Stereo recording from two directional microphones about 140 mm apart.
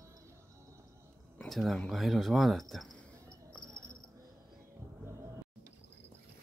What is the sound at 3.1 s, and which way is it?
Cricket, 20° right (ahead or behind).